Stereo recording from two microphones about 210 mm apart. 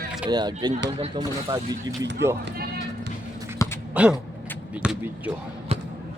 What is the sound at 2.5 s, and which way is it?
Speech, 45° right (ahead or behind).